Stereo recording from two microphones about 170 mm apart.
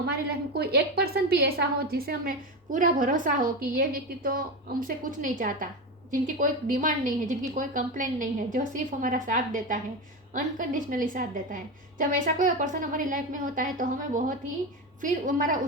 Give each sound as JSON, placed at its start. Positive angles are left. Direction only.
{"t": 0.5, "sound": "a woman's voice", "side_deg": -70}
{"t": 2.7, "sound": "a woman's voice", "side_deg": -50}